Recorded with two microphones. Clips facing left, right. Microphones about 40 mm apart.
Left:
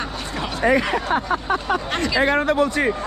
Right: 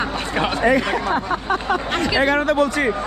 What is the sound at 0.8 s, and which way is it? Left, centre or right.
Speech, left.